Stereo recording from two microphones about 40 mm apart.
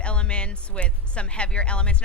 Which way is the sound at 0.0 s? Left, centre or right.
Left.